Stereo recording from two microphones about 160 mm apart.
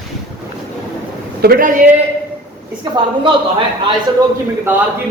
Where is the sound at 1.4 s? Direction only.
80° right.